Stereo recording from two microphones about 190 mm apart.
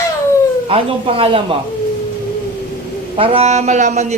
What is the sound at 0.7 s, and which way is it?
Speech, 30° right (ahead or behind).